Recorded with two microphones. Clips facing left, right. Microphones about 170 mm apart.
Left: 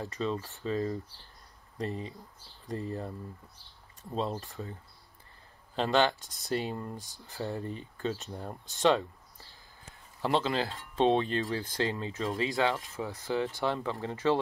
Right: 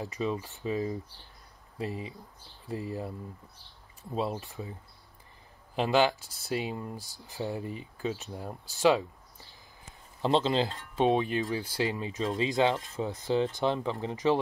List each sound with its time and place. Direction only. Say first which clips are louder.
0.0 s speech: right 1 dB; 15° right (ahead or behind)
5.8 s speech: right 1 dB; 10° right (ahead or behind)
10.2 s speech: right 3 dB; 20° right (ahead or behind)
10.7 s speech: even; centre (ahead or behind)
11.1 s speech: right 1 dB; 15° right (ahead or behind)